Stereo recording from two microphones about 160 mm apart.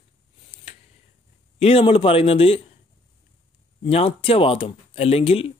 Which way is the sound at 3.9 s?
35° left (ahead or behind).